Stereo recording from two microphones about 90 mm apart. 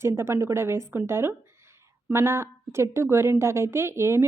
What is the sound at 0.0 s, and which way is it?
A woman's voice, 30° right (ahead or behind).